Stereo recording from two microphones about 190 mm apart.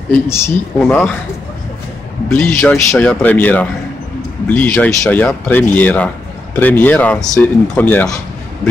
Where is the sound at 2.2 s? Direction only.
10° left (ahead or behind).